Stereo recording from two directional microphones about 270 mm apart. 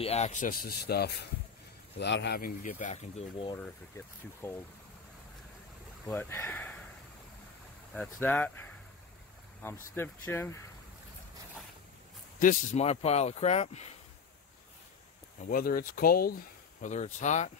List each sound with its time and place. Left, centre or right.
0.0 s speech: left
3.5 s speech: centre
6.0 s speech: centre
7.9 s speech: centre
12.4 s speech: left
15.4 s speech: left